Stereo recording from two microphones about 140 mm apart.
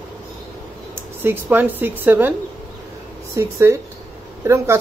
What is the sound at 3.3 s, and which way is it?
Speech, 20° right (ahead or behind).